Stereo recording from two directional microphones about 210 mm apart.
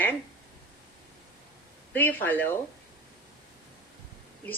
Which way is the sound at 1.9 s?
10° left (ahead or behind).